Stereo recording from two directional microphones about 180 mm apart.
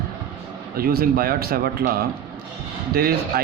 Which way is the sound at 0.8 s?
55° right (ahead or behind).